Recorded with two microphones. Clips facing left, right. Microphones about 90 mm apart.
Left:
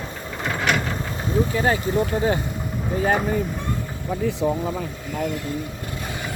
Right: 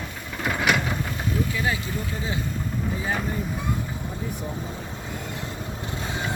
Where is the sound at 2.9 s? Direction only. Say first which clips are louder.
Left 11 dB; 65° left (ahead or behind).